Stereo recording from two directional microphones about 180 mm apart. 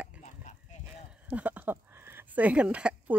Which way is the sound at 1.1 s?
5° right (ahead or behind).